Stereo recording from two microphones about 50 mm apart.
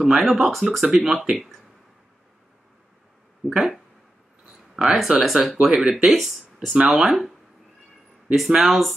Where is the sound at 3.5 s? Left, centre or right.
Centre.